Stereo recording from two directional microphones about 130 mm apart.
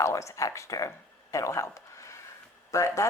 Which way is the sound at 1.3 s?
25° left (ahead or behind).